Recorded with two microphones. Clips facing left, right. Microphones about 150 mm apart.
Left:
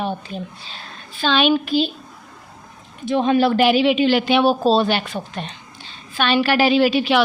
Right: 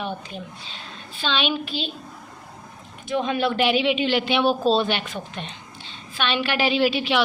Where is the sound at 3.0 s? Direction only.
35° left (ahead or behind).